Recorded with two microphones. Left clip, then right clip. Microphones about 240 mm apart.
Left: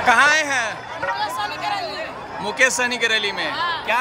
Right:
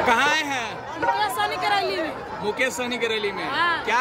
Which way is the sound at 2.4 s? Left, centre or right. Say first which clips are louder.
Left 7 dB; centre.